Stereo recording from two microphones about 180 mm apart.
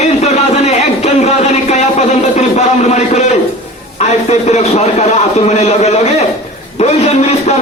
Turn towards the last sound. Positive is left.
turn(degrees=35)  # may be behind; listen again after turning